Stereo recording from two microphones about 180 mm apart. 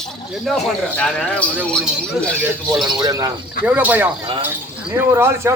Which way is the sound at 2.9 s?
20° right (ahead or behind).